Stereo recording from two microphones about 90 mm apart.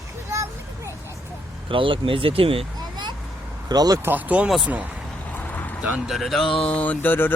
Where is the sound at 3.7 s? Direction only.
45° right (ahead or behind).